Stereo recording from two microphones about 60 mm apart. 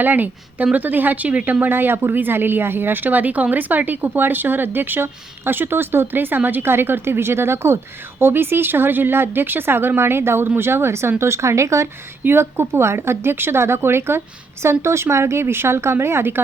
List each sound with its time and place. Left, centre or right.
0.0 s a woman's voice: right
12.2 s speech: right